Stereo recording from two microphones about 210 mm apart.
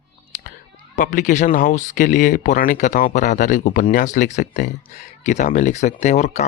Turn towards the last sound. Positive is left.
turn(degrees=30)  # may be behind; listen again after turning